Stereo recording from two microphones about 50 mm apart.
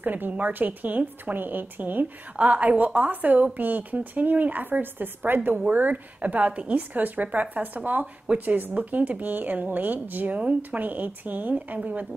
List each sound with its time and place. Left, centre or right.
0.0 s a woman's voice: right